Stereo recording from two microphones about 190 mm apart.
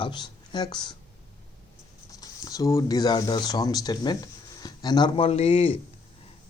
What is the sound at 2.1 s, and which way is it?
Speech, 20° left (ahead or behind).